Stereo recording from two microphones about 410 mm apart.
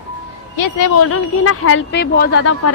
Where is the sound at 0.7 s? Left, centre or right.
Left.